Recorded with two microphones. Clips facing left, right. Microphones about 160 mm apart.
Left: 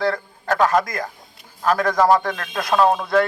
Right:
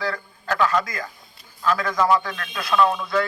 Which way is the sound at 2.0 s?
45° left (ahead or behind).